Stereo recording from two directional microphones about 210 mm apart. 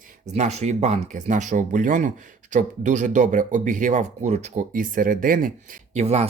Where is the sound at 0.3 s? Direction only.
30° right (ahead or behind).